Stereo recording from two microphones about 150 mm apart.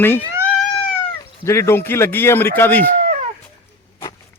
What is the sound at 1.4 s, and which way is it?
A man's voice, 20° left (ahead or behind).